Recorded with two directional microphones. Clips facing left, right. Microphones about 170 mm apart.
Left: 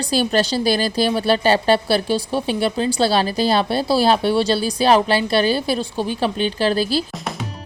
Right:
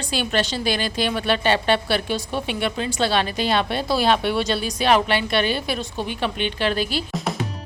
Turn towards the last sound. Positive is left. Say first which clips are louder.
# left 4 dB
turn(degrees=35)  # may be behind; listen again after turning